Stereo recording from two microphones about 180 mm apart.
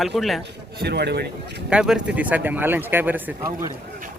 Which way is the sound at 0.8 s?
65° right (ahead or behind).